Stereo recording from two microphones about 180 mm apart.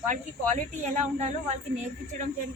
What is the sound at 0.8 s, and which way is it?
Speech, 40° right (ahead or behind).